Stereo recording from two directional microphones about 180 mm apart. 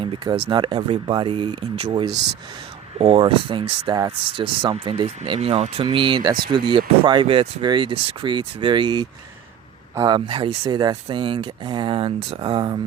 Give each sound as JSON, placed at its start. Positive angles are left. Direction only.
{"t": 0.0, "sound": "speech", "side_deg": -30}